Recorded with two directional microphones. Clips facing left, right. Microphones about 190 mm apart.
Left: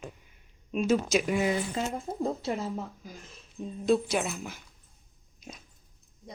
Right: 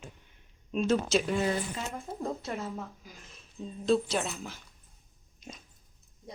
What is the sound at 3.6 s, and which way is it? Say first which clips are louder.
A woman's voice: left 1 dB; 10° left (ahead or behind).